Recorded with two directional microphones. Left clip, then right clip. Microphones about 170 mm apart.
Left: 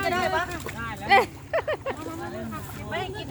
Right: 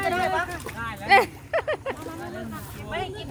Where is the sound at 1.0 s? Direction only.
15° right (ahead or behind).